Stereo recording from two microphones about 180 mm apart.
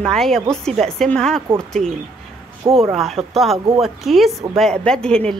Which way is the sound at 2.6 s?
15° right (ahead or behind).